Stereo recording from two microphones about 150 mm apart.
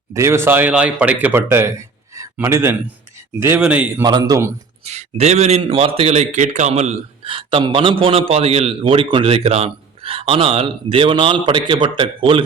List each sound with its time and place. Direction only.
0.1 s speech: 20° right (ahead or behind)
4.0 s speech: 25° right (ahead or behind)
4.9 s a man's voice: 45° right (ahead or behind)